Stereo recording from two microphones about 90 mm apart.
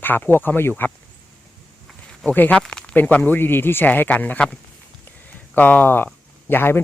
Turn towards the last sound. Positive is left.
turn(degrees=25)  # may be behind; listen again after turning